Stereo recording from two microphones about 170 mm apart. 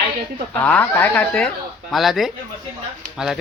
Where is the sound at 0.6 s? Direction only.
10° left (ahead or behind).